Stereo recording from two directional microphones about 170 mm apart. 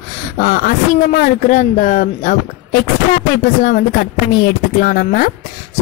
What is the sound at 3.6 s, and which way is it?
Speech, 55° left (ahead or behind).